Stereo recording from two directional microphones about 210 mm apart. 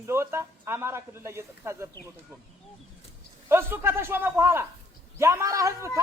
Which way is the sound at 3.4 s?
10° right (ahead or behind).